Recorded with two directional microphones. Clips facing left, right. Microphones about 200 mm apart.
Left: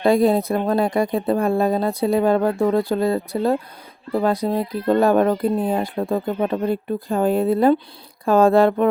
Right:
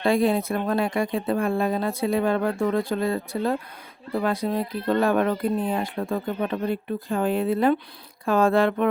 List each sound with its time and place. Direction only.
0.0 s speech: 40° left (ahead or behind)